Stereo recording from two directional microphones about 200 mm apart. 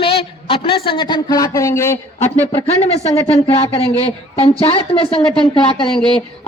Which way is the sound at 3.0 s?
30° left (ahead or behind).